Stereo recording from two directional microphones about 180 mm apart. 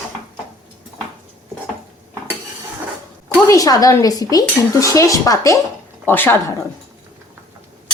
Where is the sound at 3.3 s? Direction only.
20° left (ahead or behind).